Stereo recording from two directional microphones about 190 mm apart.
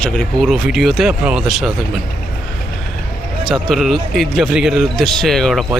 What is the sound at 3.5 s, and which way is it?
A man's voice, centre (ahead or behind).